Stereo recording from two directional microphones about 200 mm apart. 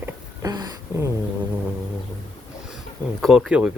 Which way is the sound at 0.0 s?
20° right (ahead or behind).